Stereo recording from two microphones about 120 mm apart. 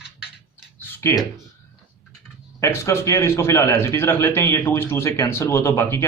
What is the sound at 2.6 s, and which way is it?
A man's voice, 25° left (ahead or behind).